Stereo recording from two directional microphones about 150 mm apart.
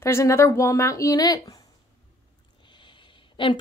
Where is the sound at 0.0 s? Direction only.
20° left (ahead or behind).